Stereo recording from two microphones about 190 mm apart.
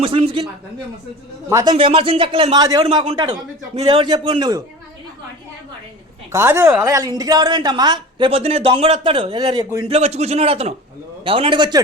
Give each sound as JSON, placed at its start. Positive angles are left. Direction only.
{"t": 0.0, "sound": "a woman's voice", "side_deg": -30}
{"t": 1.5, "sound": "a man's voice", "side_deg": -15}
{"t": 1.7, "sound": "a woman's voice", "side_deg": -30}
{"t": 6.3, "sound": "a woman's voice", "side_deg": -15}